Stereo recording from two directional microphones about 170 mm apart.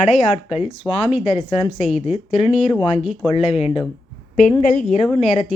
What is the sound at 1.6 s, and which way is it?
Speech, 35° left (ahead or behind).